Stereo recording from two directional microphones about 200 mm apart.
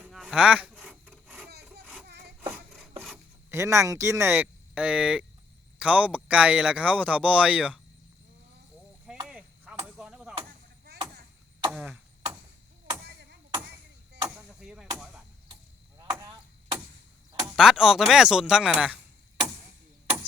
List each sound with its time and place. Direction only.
0.0 s a sound: centre (ahead or behind)
1.1 s wood: centre (ahead or behind)
1.5 s sawing: 55° right (ahead or behind)
3.5 s speech: 15° right (ahead or behind)
9.0 s a sound: 5° right (ahead or behind)
9.8 s chop: 5° right (ahead or behind)
10.8 s chop: 55° right (ahead or behind)
11.7 s cough: 5° right (ahead or behind)
13.1 s a sound: 55° right (ahead or behind)
14.2 s a sound: 5° right (ahead or behind)
14.9 s chop: 5° right (ahead or behind)
16.0 s chop: 20° right (ahead or behind)
17.4 s speech: 5° right (ahead or behind)